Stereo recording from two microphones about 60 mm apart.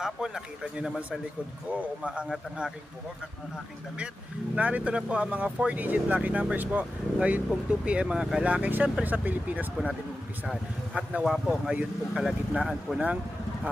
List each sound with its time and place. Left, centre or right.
0.0 s speech: centre
1.8 s speech: centre
4.5 s speech: right
8.4 s speech: right
10.9 s speech: centre
11.3 s speech: centre
11.7 s speech: right
12.5 s speech: centre